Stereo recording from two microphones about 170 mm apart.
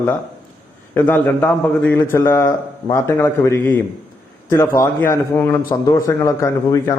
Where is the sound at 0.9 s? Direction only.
10° left (ahead or behind).